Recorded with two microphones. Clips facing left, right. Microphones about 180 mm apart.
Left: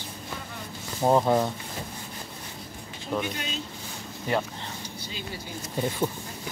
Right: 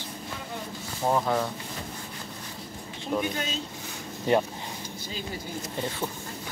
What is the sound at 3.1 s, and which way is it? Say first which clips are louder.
Speech: right 1 dB; 5° right (ahead or behind).